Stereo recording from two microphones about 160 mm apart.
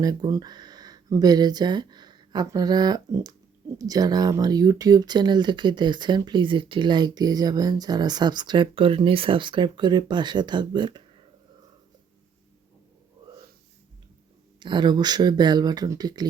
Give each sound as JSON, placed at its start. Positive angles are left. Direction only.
{"t": 0.0, "sound": "speech", "side_deg": -25}
{"t": 14.6, "sound": "speech", "side_deg": -30}